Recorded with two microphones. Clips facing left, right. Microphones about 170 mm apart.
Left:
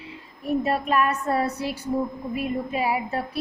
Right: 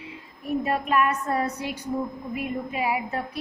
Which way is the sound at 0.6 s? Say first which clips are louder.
Right 1 dB; 35° left (ahead or behind).